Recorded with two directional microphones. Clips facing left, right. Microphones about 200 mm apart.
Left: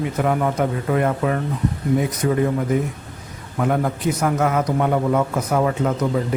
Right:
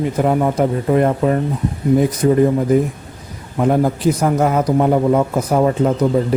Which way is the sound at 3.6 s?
30° right (ahead or behind).